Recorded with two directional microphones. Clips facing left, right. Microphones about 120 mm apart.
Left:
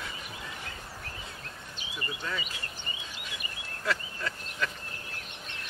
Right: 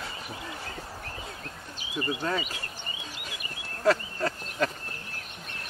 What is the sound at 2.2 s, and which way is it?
Speech, 45° right (ahead or behind).